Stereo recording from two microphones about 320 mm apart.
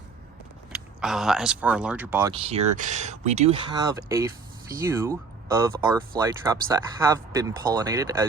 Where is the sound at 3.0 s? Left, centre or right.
Right.